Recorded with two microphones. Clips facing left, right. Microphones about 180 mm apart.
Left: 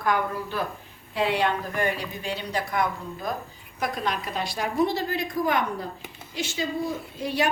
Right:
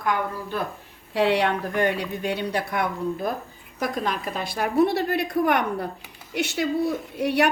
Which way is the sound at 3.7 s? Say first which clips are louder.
Right 2 dB; 45° right (ahead or behind).